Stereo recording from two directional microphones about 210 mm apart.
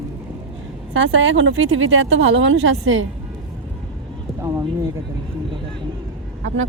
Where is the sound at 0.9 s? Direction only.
60° right (ahead or behind).